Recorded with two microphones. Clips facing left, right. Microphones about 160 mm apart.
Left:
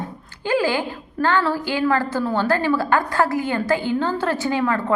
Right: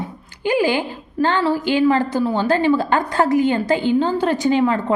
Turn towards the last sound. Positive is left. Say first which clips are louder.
# right 4 dB
turn(degrees=-20)  # may be behind; listen again after turning